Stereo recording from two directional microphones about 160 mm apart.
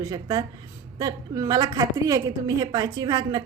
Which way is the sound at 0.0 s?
20° right (ahead or behind).